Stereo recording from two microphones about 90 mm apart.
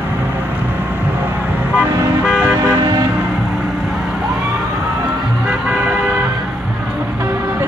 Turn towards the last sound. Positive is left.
turn(degrees=-20)  # may be behind; listen again after turning